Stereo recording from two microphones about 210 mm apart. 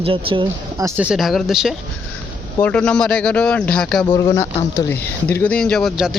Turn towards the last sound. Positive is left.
turn(degrees=0)  # may be behind; listen again after turning